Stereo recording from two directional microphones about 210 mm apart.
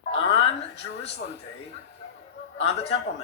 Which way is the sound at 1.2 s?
45° left (ahead or behind).